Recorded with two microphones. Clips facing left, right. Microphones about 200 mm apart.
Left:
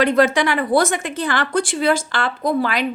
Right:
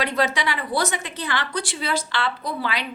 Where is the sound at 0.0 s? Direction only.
50° left (ahead or behind).